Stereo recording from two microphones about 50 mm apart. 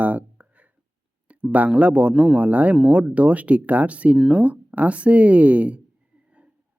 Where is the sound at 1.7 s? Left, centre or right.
Right.